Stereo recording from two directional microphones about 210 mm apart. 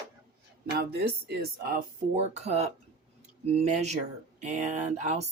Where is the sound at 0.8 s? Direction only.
50° right (ahead or behind).